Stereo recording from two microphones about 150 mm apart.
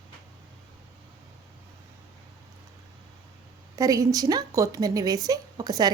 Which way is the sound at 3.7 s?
20° right (ahead or behind).